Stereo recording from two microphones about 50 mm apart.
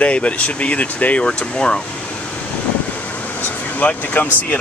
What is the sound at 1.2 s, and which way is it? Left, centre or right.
Speech, centre.